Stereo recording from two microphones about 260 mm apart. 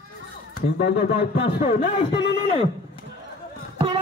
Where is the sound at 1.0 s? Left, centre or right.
Left.